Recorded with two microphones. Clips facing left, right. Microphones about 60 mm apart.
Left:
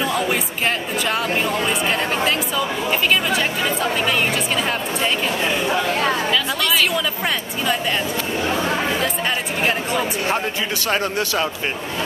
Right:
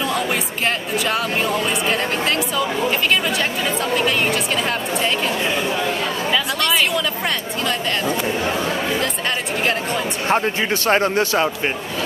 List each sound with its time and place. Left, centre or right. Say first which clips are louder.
0.0 s speech: left 1 dB; centre
10.2 s a man's voice: right 3 dB; right